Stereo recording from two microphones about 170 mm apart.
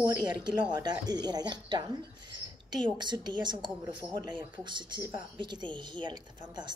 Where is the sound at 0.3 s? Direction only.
25° right (ahead or behind).